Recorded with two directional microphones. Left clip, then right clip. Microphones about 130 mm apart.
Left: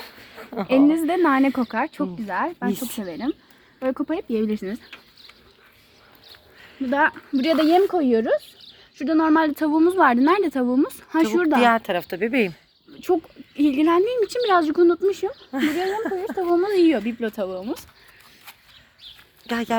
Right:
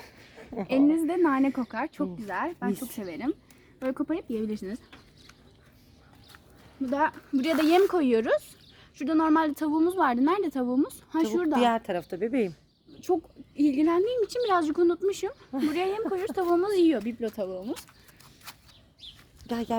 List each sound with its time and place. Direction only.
0.0 s a sound: centre (ahead or behind)
0.7 s speech: 85° left; by 2.7 s 55° left (ahead or behind)
2.7 s speech: 10° right (ahead or behind)
3.0 s speech: 50° left (ahead or behind)
4.0 s speech: 70° left (ahead or behind)
4.5 s speech: 50° left (ahead or behind)
6.9 s speech: 50° left (ahead or behind)
7.3 s speech: 25° left (ahead or behind); by 11.6 s 45° left (ahead or behind)
11.6 s a woman's voice: 10° right (ahead or behind)
13.6 s speech: 25° left (ahead or behind)
15.8 s a woman's voice: centre (ahead or behind)
16.6 s speech: 35° left (ahead or behind)
19.5 s speech: 10° right (ahead or behind)